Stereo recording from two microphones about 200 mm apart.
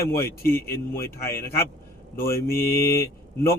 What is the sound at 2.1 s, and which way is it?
Speech, 45° left (ahead or behind).